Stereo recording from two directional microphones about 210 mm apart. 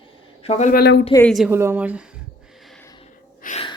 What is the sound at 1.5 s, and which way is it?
Speech, 10° right (ahead or behind).